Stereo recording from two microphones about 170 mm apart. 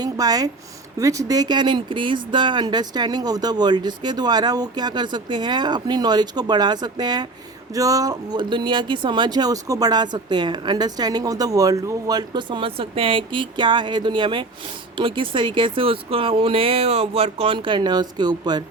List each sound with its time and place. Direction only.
0.0 s speech: 20° right (ahead or behind)